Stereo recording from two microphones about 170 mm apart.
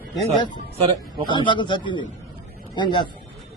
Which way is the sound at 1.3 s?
30° left (ahead or behind).